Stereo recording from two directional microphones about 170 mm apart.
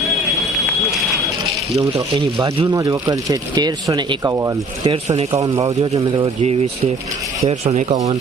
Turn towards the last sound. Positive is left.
turn(degrees=-40)  # may be behind; listen again after turning